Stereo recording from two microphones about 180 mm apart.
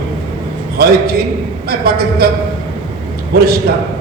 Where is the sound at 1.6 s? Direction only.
55° right (ahead or behind).